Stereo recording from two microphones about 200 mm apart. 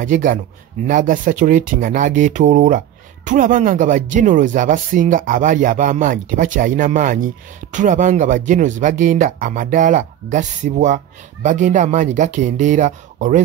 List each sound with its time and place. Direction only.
0.0 s speech: 40° right (ahead or behind)